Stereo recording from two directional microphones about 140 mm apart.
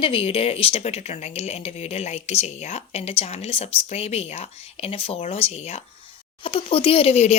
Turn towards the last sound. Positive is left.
turn(degrees=50)  # may be behind; listen again after turning